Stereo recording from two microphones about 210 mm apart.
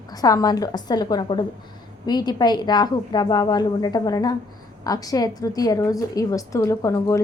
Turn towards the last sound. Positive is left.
turn(degrees=15)  # may be behind; listen again after turning